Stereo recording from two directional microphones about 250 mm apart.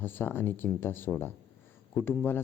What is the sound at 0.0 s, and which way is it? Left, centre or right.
A man's voice, centre.